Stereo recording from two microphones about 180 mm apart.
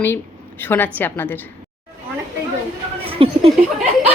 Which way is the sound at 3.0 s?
30° right (ahead or behind).